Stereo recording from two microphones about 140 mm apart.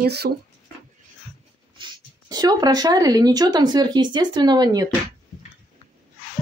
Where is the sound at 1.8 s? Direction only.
30° right (ahead or behind).